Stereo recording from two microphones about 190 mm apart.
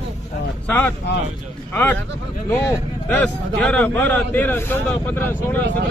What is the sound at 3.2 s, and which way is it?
A man's voice, 5° left (ahead or behind).